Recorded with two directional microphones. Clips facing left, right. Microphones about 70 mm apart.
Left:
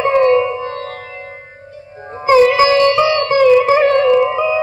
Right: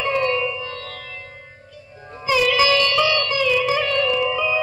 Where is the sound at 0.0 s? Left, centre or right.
Left.